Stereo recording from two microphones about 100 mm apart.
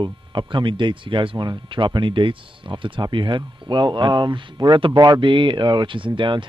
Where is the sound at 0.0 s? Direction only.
55° right (ahead or behind).